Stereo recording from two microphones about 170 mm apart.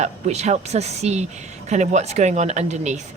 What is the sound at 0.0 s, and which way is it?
A woman's voice, 40° right (ahead or behind).